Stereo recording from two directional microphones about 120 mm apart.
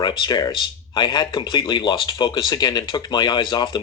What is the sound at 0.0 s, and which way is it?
Speech, 40° left (ahead or behind).